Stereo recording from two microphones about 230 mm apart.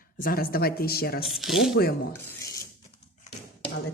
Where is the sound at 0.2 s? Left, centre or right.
Left.